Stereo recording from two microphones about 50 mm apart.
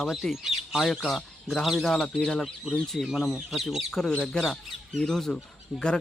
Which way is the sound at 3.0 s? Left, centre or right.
Centre.